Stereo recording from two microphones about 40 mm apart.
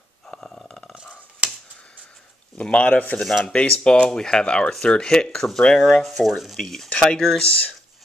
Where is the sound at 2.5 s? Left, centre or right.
Left.